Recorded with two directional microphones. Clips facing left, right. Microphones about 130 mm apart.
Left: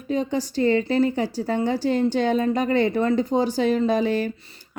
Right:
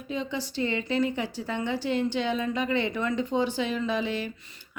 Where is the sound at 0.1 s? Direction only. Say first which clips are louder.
Left 8 dB; 45° left (ahead or behind).